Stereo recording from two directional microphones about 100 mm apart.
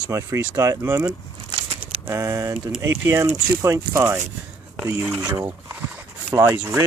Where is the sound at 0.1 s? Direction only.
30° right (ahead or behind).